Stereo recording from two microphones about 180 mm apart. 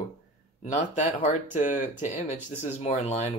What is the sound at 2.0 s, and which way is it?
Speech, 40° left (ahead or behind).